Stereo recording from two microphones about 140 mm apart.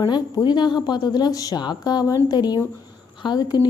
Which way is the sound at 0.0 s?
30° left (ahead or behind).